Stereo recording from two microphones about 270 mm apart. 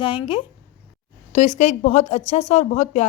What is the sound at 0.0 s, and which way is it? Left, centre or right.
A woman's voice, centre.